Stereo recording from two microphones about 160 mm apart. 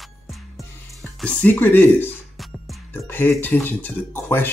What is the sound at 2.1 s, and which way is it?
Music, centre (ahead or behind).